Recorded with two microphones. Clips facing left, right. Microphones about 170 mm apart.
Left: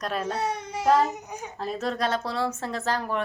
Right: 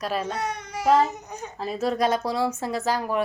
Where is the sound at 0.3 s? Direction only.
30° left (ahead or behind).